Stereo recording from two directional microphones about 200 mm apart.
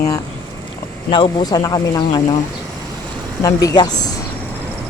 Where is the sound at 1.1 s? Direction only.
25° left (ahead or behind).